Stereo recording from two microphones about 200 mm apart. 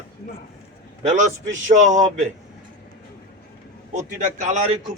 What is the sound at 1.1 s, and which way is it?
A man's voice, 35° right (ahead or behind).